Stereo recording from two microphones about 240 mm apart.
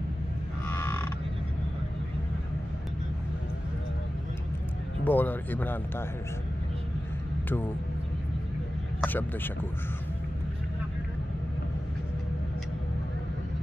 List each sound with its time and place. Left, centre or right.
0.7 s a sound: centre
5.0 s speech: centre
7.4 s speech: centre
9.0 s speech: centre